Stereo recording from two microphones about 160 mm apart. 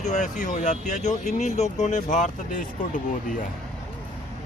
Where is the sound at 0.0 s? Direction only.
50° left (ahead or behind).